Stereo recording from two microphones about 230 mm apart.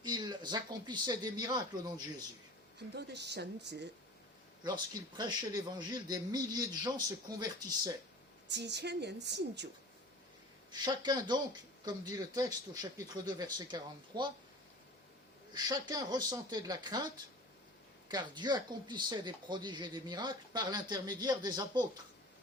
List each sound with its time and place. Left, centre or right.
0.0 s speech: centre
2.7 s a woman's voice: right
4.6 s a man's voice: centre
8.4 s a woman's voice: right
10.7 s a man's voice: centre
15.5 s a man's voice: centre
18.1 s speech: centre